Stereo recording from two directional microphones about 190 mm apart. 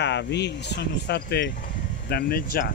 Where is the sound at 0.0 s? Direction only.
65° left (ahead or behind).